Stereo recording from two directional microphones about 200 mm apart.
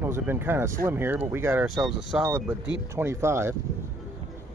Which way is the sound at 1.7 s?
Centre (ahead or behind).